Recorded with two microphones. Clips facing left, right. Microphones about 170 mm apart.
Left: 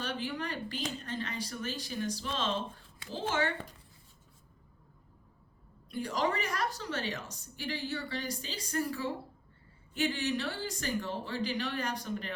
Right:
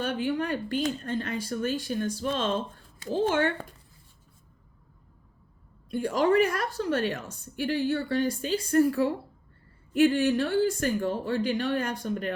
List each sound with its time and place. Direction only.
0.0 s speech: 50° right (ahead or behind)
5.9 s a woman's voice: 55° right (ahead or behind)